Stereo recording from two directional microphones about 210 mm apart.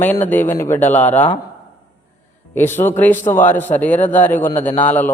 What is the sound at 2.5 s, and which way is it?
A man's voice, 10° left (ahead or behind).